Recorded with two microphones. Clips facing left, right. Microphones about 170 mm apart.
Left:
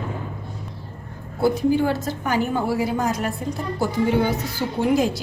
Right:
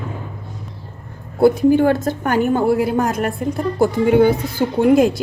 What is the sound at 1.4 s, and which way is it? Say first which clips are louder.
A woman's voice: right 6 dB; 55° right (ahead or behind).